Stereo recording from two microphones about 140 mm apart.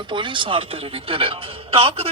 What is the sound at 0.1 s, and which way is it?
Speech, 35° right (ahead or behind).